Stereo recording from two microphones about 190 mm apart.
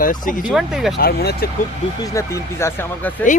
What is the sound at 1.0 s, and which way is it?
Speech, 55° left (ahead or behind).